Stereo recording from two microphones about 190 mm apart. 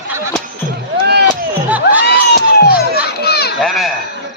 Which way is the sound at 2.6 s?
55° left (ahead or behind).